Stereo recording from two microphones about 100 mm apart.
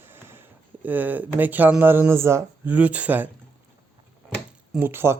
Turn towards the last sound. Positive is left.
turn(degrees=-25)  # may be behind; listen again after turning